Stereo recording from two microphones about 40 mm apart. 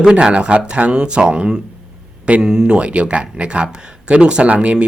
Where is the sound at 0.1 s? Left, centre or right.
Right.